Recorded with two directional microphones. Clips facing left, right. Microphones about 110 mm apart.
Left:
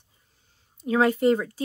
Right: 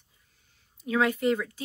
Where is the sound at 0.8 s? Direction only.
35° left (ahead or behind).